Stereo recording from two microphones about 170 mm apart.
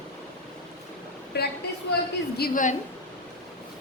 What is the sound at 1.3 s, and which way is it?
Speech, 75° left (ahead or behind).